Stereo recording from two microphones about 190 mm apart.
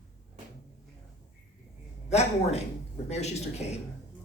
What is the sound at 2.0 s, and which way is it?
Speech, 35° left (ahead or behind).